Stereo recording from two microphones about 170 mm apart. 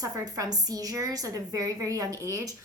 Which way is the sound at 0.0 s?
20° right (ahead or behind).